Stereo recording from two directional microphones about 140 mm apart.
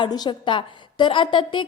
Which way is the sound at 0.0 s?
30° left (ahead or behind).